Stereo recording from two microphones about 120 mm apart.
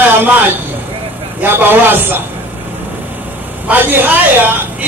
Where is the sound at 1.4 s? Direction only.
15° right (ahead or behind).